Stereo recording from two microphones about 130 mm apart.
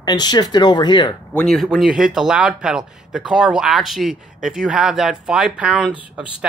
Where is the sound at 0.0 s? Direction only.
30° left (ahead or behind).